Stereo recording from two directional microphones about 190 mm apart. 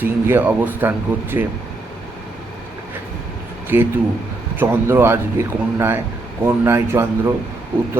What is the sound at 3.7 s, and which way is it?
A man's voice, 10° right (ahead or behind).